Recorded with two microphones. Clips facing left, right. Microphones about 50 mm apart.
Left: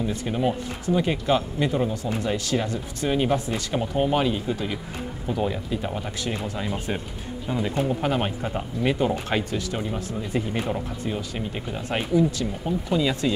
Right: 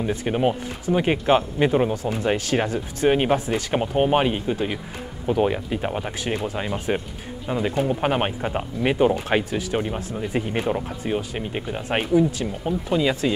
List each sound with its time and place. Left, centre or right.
0.1 s speech: right